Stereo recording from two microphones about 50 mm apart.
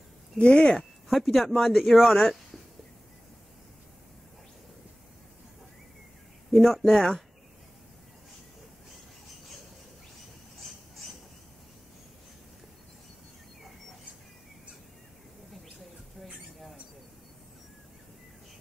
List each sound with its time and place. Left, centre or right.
0.4 s speech: centre
1.0 s speech: centre
6.5 s speech: centre